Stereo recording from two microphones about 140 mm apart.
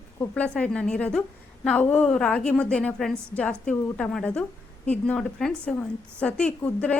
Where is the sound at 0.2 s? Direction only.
10° left (ahead or behind).